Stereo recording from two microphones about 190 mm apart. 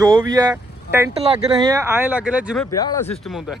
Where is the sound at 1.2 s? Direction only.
30° right (ahead or behind).